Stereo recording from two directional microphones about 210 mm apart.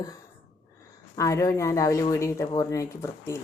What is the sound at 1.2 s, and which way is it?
Speech, 15° left (ahead or behind).